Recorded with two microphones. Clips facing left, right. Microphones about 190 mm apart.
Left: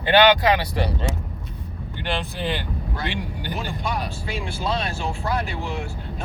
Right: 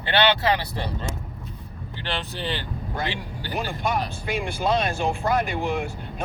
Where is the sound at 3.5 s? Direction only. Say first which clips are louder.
Right 3 dB; 50° right (ahead or behind).